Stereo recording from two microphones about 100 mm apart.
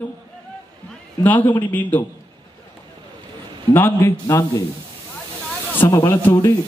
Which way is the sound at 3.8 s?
20° left (ahead or behind).